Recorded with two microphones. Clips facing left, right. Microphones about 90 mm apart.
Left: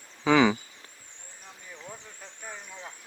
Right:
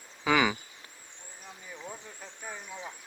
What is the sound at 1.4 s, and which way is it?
Speech, 5° right (ahead or behind).